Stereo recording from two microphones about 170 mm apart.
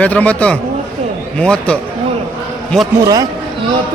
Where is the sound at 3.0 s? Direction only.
20° right (ahead or behind).